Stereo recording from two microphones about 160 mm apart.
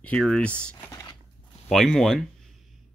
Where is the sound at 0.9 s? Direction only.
20° left (ahead or behind).